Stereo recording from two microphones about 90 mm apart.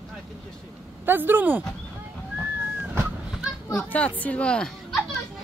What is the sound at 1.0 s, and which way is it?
Speech, 20° right (ahead or behind).